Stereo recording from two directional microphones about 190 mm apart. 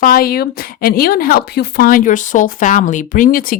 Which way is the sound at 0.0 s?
50° left (ahead or behind).